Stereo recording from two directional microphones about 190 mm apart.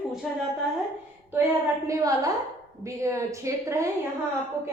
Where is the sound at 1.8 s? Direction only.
15° right (ahead or behind).